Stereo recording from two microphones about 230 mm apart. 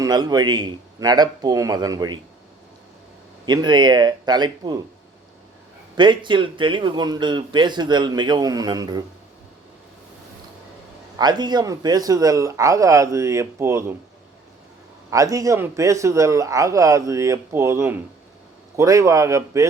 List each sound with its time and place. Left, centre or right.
0.0 s a man's voice: centre
3.4 s speech: centre
6.0 s speech: centre
11.2 s a man's voice: centre
15.1 s a man's voice: centre